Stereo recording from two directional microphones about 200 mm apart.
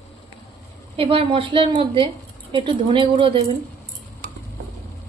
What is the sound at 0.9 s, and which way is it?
A woman's voice, 30° right (ahead or behind).